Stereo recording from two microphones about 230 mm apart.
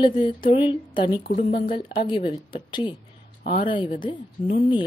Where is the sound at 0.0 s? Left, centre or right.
Left.